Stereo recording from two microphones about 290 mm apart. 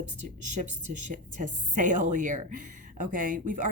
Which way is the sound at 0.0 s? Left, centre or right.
Right.